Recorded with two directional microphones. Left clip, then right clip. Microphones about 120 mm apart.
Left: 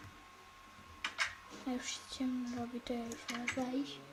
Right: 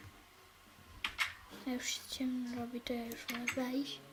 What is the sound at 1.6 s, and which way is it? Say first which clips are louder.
Speech: right 2 dB; 5° right (ahead or behind).